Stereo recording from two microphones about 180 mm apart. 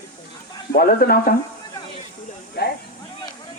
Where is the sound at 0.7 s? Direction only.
55° left (ahead or behind).